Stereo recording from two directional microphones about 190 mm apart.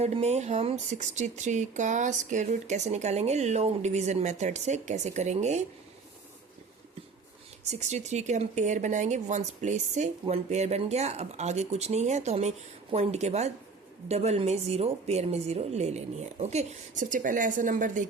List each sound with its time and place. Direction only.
0.0 s speech: 35° right (ahead or behind)
7.7 s speech: 35° right (ahead or behind)